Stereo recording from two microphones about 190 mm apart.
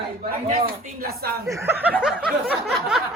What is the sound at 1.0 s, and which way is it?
Speech, 55° right (ahead or behind).